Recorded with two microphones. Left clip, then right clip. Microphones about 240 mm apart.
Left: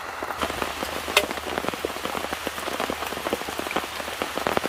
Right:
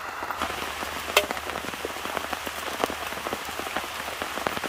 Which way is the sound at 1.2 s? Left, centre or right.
Right.